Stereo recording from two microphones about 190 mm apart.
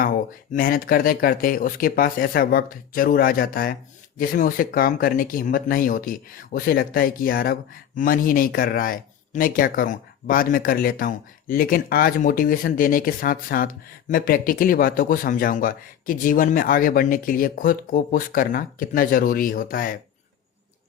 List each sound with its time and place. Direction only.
0.0 s speech: 50° left (ahead or behind)